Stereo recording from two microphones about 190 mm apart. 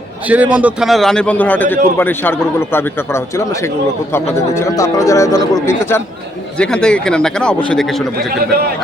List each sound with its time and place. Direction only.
0.3 s a man's voice: 5° right (ahead or behind)